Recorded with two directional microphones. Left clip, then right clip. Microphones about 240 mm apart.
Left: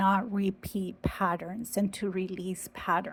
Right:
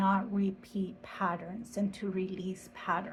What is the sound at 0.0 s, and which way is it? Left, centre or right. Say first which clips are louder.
A woman's voice: left 4 dB; left.